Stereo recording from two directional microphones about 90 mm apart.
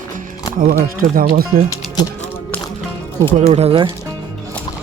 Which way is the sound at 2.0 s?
50° left (ahead or behind).